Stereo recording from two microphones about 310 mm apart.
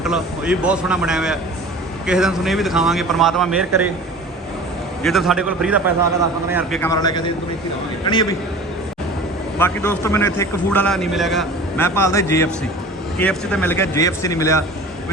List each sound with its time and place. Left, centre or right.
0.0 s speech: centre
5.0 s speech: centre
6.8 s a man's voice: centre
9.6 s a man's voice: centre